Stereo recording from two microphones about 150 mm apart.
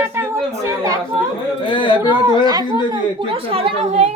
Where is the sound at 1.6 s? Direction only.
35° left (ahead or behind).